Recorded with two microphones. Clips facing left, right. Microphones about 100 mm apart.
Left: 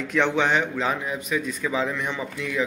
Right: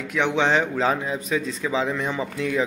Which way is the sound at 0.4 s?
30° right (ahead or behind).